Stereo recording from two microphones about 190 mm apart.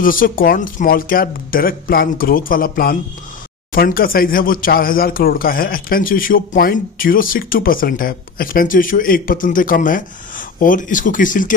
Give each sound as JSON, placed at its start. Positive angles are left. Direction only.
{"t": 0.0, "sound": "speech", "side_deg": 45}